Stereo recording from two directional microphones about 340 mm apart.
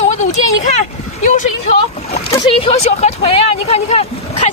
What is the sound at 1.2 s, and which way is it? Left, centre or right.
A woman's voice, left.